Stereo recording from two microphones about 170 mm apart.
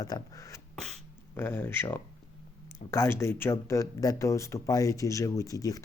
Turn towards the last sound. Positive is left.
turn(degrees=20)  # may be behind; listen again after turning